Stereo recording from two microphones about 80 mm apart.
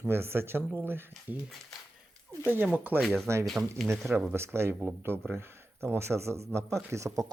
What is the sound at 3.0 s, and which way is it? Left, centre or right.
Speech, centre.